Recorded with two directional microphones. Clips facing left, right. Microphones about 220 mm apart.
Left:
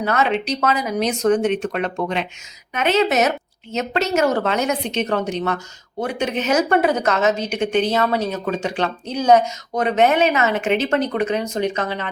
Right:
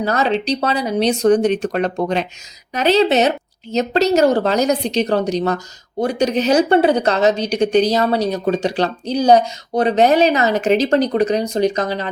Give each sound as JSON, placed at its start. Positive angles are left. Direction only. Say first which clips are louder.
{"t": 0.0, "sound": "speech", "louder": "right 2 dB", "side_deg": -35}